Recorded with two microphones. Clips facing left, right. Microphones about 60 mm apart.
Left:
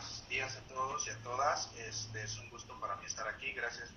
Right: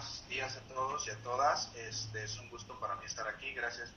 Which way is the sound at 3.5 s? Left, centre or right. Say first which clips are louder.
Right 1 dB; centre.